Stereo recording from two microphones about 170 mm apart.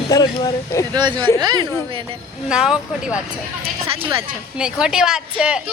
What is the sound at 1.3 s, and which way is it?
Speech, 25° right (ahead or behind).